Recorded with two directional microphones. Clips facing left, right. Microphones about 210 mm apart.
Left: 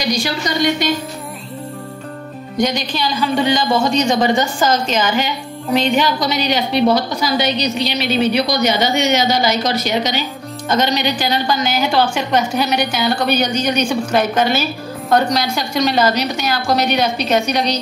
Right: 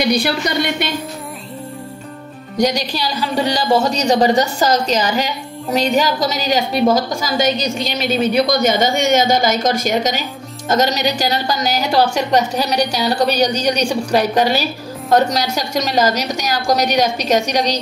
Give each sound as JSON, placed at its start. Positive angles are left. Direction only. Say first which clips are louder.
{"t": 0.0, "sound": "a woman's voice", "louder": "right 3 dB", "side_deg": -60}
{"t": 2.6, "sound": "a woman's voice", "louder": "right 1 dB", "side_deg": -40}